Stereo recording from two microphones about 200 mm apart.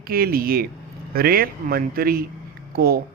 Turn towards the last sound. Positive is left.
turn(degrees=-45)  # may be behind; listen again after turning